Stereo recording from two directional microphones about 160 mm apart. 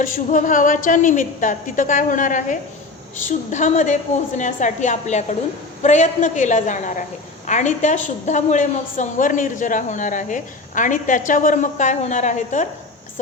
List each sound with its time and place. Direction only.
0.0 s a woman's voice: 55° left (ahead or behind)